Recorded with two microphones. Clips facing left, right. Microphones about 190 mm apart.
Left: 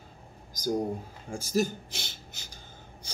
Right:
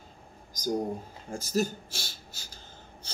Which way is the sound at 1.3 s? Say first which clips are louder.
Left 1 dB; 10° left (ahead or behind).